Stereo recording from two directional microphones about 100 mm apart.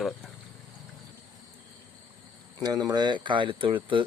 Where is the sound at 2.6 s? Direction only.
40° right (ahead or behind); by 4.0 s 60° right (ahead or behind).